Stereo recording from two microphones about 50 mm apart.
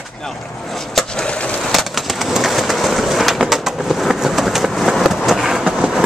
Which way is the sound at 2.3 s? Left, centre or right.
Centre.